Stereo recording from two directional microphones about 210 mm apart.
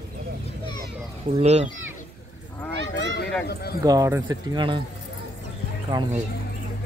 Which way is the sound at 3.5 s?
50° left (ahead or behind).